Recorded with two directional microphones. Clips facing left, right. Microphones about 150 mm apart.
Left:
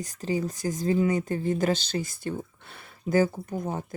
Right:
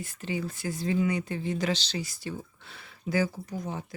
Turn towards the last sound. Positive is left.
turn(degrees=50)  # may be behind; listen again after turning